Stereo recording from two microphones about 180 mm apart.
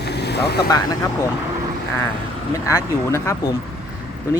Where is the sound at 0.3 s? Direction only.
65° left (ahead or behind).